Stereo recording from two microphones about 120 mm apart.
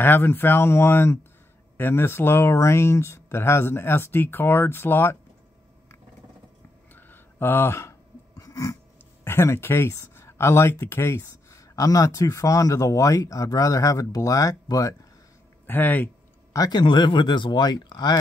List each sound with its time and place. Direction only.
0.0 s speech: 20° left (ahead or behind)
7.0 s a sound: 15° left (ahead or behind)
9.2 s speech: 20° left (ahead or behind)
15.6 s speech: 15° left (ahead or behind)
16.5 s speech: 35° left (ahead or behind)